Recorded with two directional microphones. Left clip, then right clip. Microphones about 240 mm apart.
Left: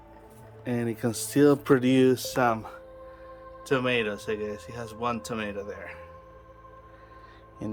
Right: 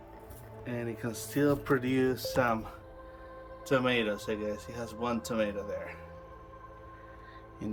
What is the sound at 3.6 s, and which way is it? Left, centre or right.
Speech, centre.